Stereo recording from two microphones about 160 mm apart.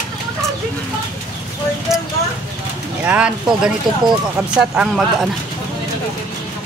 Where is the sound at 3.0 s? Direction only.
5° right (ahead or behind).